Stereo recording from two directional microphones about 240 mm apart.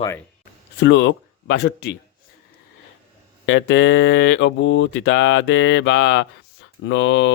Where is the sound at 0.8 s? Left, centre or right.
Left.